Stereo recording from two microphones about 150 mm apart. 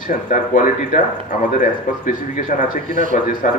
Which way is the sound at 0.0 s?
60° left (ahead or behind).